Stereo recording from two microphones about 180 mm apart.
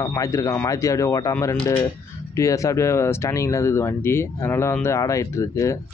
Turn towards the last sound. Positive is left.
turn(degrees=15)  # may be behind; listen again after turning